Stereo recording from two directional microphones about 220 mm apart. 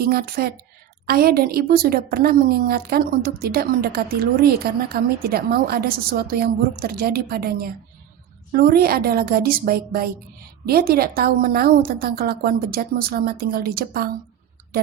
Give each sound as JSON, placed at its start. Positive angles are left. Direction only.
{"t": 0.0, "sound": "a woman's voice", "side_deg": -45}